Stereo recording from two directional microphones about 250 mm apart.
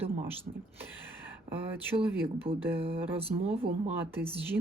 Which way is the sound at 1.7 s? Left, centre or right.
Centre.